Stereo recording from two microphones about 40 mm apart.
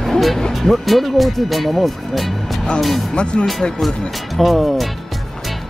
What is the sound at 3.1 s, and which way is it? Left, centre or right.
Speech, left.